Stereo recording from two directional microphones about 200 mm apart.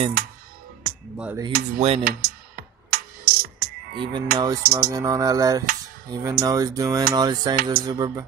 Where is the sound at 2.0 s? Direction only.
50° right (ahead or behind).